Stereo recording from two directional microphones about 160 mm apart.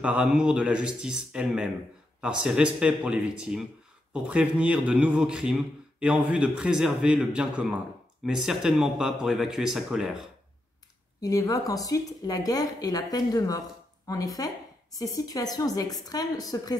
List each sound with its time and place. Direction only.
0.0 s a man's voice: 5° right (ahead or behind)
11.1 s a woman's voice: 20° left (ahead or behind)